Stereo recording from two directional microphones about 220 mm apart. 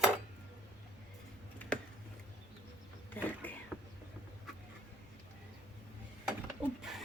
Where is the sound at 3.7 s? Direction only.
Centre (ahead or behind).